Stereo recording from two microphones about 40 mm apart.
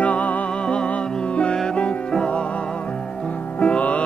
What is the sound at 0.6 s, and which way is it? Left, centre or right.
Music, left.